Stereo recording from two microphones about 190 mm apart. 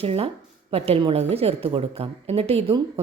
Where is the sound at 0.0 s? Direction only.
30° right (ahead or behind).